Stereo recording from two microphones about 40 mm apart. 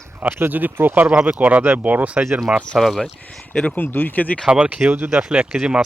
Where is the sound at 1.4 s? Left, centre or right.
Right.